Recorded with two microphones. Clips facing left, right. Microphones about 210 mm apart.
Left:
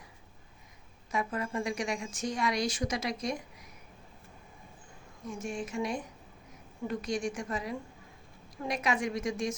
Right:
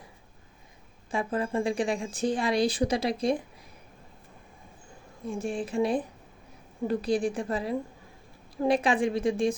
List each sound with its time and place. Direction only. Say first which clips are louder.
1.1 s a woman's voice: right 5 dB; 30° right (ahead or behind)
5.2 s a woman's voice: right 5 dB; 35° right (ahead or behind)